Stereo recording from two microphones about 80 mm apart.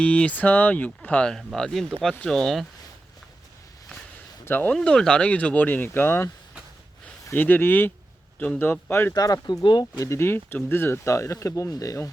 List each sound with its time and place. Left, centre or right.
0.0 s speech: centre
1.5 s speech: centre
4.4 s speech: left
4.7 s speech: centre; by 6.3 s left
7.3 s speech: left
9.1 s speech: left
10.0 s speech: left